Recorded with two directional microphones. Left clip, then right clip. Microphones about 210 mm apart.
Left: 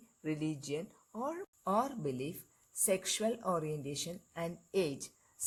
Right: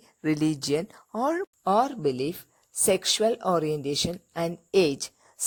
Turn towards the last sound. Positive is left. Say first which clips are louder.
# right 12 dB
turn(degrees=-45)  # may be behind; listen again after turning